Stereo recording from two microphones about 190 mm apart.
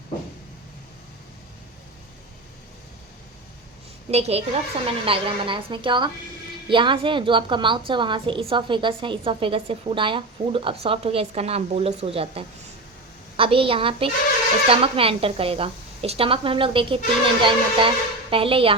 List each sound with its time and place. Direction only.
4.1 s a woman's voice: 35° right (ahead or behind)